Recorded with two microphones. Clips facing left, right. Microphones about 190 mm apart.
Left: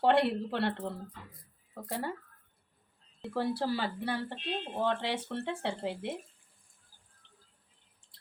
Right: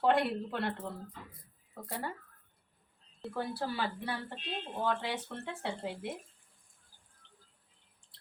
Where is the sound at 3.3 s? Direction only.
30° left (ahead or behind).